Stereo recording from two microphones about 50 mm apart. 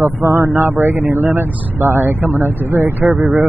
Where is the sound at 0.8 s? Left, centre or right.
Right.